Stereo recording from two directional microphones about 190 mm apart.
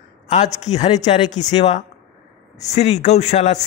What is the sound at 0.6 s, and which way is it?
A man's voice, 35° left (ahead or behind).